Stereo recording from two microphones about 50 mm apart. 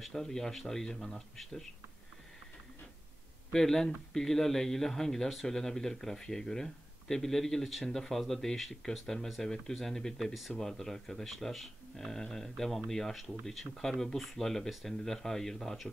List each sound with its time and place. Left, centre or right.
0.0 s speech: centre
3.5 s speech: centre